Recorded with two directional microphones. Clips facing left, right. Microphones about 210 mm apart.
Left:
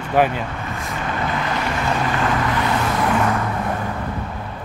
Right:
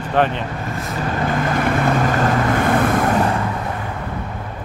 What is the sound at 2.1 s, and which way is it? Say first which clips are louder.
Vehicle: right 3 dB; 45° right (ahead or behind).